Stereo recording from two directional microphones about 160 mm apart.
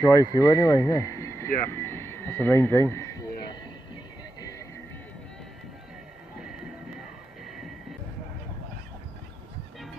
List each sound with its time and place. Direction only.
0.0 s speech: 20° left (ahead or behind)
4.4 s music: 20° left (ahead or behind)